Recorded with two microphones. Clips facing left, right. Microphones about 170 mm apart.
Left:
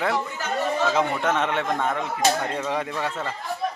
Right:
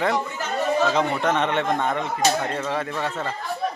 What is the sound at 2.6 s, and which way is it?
Speech, 15° left (ahead or behind).